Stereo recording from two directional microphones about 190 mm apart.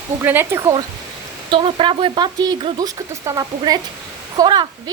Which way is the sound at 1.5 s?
30° right (ahead or behind).